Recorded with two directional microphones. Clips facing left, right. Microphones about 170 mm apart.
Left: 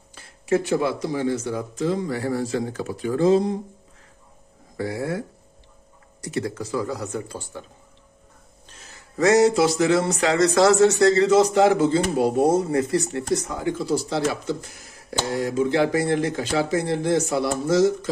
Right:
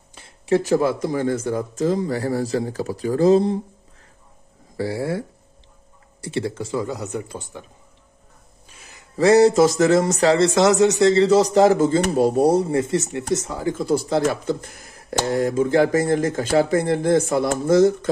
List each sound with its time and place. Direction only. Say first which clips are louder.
0.1 s a sound: right 2 dB; 25° right (ahead or behind)
0.6 s speech: right 4 dB; 40° right (ahead or behind)
4.7 s a man's voice: right 2 dB; 30° right (ahead or behind)
6.2 s a man's voice: right 2 dB; 25° right (ahead or behind)
8.6 s a sound: even; 10° right (ahead or behind)
9.1 s speech: right 3 dB; 30° right (ahead or behind)
10.3 s a man's voice: left 1 dB; 25° right (ahead or behind)
13.6 s speech: right 2 dB; 45° right (ahead or behind)